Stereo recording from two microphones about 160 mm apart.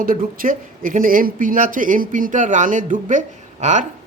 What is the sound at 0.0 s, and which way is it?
Speech, 60° right (ahead or behind).